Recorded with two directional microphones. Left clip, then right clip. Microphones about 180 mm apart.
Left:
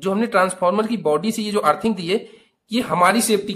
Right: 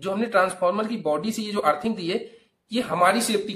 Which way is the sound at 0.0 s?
35° left (ahead or behind).